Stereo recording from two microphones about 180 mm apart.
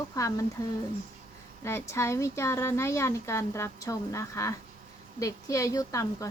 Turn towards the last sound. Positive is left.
turn(degrees=20)  # may be behind; listen again after turning